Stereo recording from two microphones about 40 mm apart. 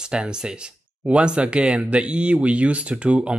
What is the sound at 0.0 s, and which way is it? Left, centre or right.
Speech, right.